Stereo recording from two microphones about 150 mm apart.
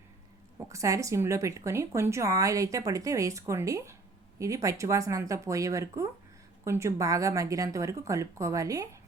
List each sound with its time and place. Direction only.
0.7 s speech: 20° right (ahead or behind)